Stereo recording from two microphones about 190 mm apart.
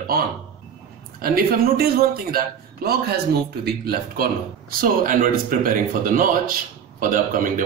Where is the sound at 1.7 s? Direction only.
55° right (ahead or behind).